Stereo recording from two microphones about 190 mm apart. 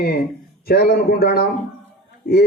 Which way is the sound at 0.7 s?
55° left (ahead or behind).